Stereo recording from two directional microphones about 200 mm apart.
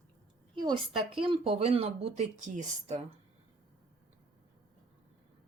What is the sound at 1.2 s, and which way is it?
Speech, 25° right (ahead or behind).